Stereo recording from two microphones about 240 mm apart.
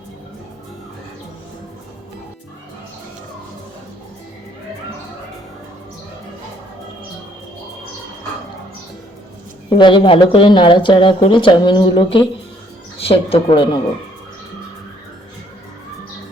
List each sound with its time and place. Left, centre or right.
9.7 s speech: centre